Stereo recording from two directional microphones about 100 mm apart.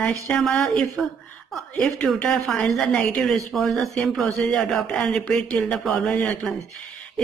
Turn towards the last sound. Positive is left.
turn(degrees=20)  # may be behind; listen again after turning